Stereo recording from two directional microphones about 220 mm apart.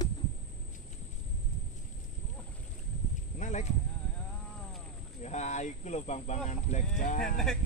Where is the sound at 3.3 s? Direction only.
35° left (ahead or behind).